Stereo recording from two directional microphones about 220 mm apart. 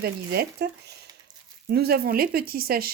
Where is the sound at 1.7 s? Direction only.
45° right (ahead or behind).